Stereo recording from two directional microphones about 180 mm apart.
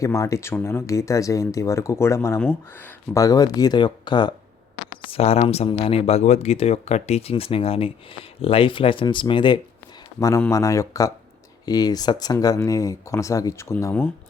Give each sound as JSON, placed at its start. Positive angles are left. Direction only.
{"t": 0.0, "sound": "speech", "side_deg": 15}